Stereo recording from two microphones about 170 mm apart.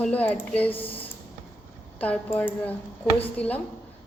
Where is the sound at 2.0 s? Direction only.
10° left (ahead or behind).